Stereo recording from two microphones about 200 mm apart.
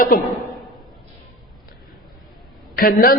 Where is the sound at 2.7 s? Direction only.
45° left (ahead or behind).